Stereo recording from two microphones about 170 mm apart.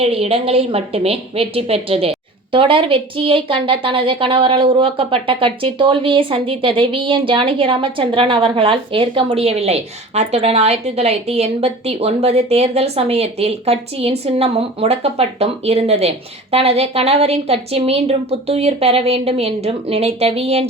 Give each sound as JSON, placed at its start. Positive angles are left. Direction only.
{"t": 0.0, "sound": "a woman's voice", "side_deg": -35}